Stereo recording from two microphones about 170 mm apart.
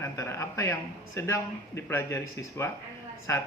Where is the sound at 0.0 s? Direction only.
15° left (ahead or behind).